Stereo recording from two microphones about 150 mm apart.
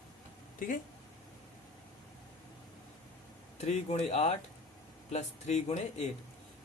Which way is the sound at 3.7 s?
45° left (ahead or behind).